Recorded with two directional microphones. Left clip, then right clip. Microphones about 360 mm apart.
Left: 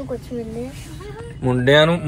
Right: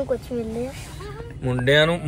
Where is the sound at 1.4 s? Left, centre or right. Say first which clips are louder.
Left 4 dB; centre.